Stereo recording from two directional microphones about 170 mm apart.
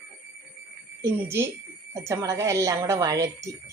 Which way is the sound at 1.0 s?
10° right (ahead or behind).